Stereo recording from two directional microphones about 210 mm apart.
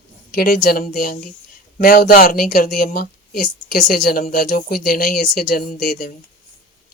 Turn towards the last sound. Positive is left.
turn(degrees=45)  # may be behind; listen again after turning